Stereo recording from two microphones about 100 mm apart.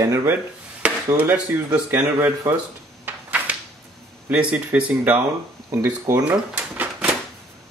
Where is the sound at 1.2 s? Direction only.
20° right (ahead or behind).